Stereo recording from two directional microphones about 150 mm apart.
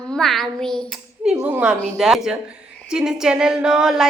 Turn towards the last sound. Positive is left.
turn(degrees=-5)  # may be behind; listen again after turning